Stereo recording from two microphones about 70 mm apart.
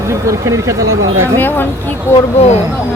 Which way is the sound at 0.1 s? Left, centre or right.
Right.